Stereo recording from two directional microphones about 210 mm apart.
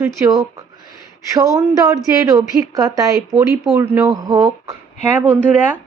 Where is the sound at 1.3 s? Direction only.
15° right (ahead or behind).